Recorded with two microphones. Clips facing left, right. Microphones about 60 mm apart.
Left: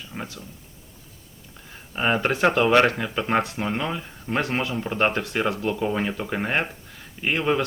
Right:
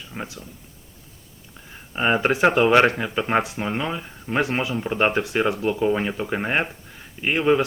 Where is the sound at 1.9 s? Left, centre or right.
Centre.